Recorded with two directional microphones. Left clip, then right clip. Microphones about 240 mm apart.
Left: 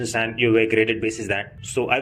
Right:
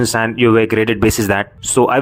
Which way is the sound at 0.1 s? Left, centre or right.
Right.